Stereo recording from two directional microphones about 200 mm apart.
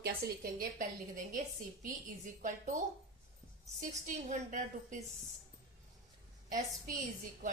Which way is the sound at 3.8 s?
40° right (ahead or behind).